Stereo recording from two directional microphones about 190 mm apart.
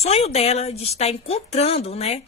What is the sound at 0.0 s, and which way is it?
Speech, 35° left (ahead or behind).